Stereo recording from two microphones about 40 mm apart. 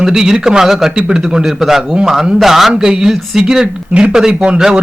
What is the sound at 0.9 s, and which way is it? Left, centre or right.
Speech, right.